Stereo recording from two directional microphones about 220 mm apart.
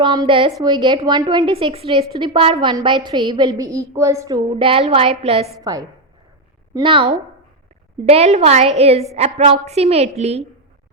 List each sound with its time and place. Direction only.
0.0 s a woman's voice: 20° right (ahead or behind)